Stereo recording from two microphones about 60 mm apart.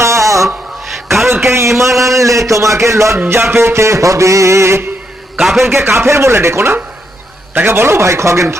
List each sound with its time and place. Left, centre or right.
0.0 s music: right
0.4 s music: centre
1.5 s a sound: right
1.8 s a man's voice: right
3.2 s music: right
5.4 s a man's voice: centre
5.6 s music: right